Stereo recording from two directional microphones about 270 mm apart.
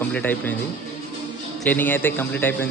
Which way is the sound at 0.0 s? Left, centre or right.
Centre.